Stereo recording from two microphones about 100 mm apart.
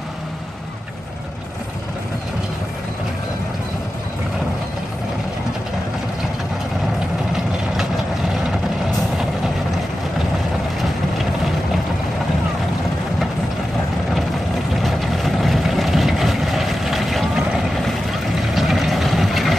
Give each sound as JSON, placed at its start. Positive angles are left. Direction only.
{"t": 14.8, "sound": "vehicle", "side_deg": 0}
{"t": 18.5, "sound": "vehicle", "side_deg": 0}